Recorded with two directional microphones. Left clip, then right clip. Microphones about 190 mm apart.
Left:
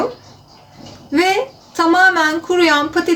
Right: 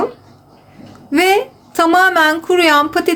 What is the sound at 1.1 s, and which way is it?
A woman's voice, 60° right (ahead or behind).